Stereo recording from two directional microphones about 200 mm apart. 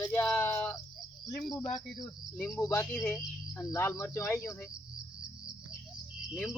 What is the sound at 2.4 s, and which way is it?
Speech, 10° left (ahead or behind).